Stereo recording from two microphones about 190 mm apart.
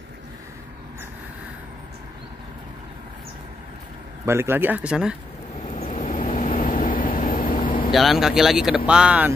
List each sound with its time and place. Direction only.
4.3 s speech: 10° right (ahead or behind)
5.8 s vehicle: 35° left (ahead or behind)
7.9 s speech: centre (ahead or behind)